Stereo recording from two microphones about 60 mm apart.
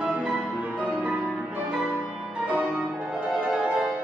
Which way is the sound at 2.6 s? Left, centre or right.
Centre.